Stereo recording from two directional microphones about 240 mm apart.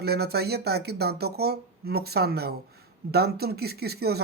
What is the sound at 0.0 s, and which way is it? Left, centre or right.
Speech, right.